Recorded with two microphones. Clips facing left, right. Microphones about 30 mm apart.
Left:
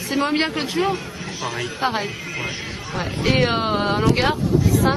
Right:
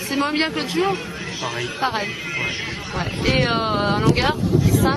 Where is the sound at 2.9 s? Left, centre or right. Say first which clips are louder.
Left 1 dB; centre.